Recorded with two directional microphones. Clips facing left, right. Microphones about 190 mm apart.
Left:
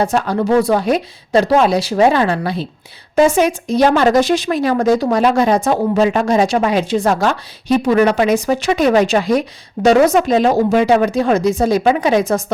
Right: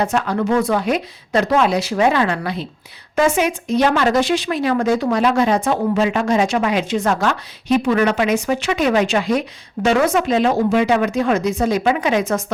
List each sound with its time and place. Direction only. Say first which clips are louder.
0.0 s speech: left 3 dB; 35° left (ahead or behind)